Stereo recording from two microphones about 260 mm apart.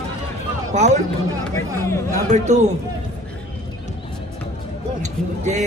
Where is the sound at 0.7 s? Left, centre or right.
Right.